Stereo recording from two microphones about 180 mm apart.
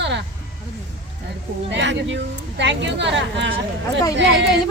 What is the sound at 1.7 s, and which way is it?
A woman's voice, 85° right.